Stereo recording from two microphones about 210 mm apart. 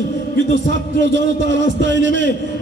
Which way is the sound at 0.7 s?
60° right (ahead or behind).